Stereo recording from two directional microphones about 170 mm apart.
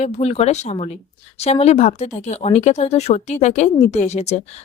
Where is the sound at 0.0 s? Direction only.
40° left (ahead or behind).